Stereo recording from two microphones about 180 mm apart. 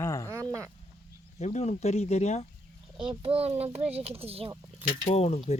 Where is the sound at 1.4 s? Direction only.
40° left (ahead or behind).